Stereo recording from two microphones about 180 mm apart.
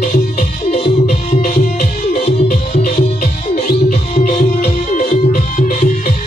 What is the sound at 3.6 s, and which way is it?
Music, 45° left (ahead or behind).